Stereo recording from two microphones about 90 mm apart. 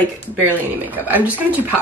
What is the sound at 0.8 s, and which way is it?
Speech, 20° right (ahead or behind).